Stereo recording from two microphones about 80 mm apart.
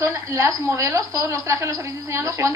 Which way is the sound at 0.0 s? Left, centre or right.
Right.